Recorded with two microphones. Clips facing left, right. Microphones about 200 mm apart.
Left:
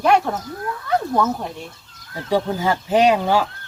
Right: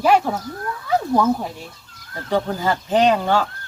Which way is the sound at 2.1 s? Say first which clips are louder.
Left 1 dB; 5° left (ahead or behind).